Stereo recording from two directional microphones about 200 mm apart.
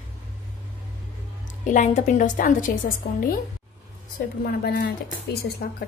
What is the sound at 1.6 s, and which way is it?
A woman's voice, 35° left (ahead or behind).